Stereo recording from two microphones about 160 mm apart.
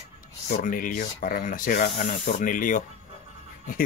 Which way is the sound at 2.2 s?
55° left (ahead or behind).